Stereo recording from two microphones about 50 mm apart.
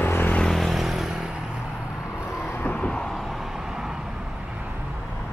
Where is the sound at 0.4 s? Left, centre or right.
Centre.